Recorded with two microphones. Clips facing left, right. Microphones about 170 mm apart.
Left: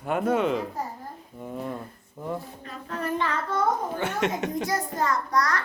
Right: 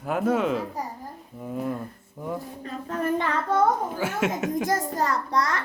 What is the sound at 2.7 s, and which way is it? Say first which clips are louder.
Child singing: right 4 dB; 45° right (ahead or behind).